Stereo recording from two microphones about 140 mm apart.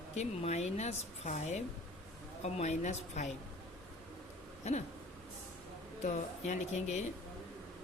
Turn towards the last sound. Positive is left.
turn(degrees=55)  # may be behind; listen again after turning